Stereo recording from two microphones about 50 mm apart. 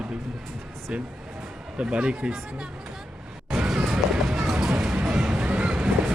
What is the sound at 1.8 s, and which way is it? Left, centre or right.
Speech, right.